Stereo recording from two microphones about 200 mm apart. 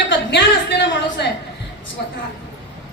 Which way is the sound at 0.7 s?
65° left (ahead or behind).